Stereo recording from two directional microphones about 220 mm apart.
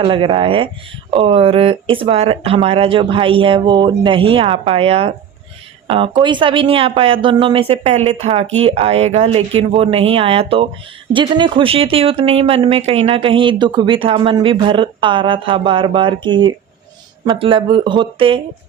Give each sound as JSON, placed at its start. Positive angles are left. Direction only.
{"t": 0.0, "sound": "speech", "side_deg": -25}